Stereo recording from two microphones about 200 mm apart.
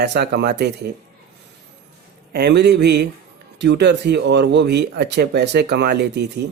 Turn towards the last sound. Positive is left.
turn(degrees=-55)  # may be behind; listen again after turning